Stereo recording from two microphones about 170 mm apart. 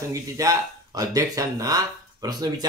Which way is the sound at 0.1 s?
20° right (ahead or behind).